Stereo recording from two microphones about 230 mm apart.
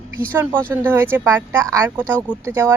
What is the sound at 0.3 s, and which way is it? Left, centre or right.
Speech, centre.